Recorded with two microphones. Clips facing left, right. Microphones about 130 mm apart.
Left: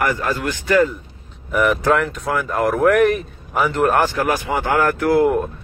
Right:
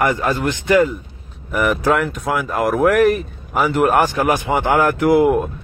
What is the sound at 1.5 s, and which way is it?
Speech, 5° right (ahead or behind).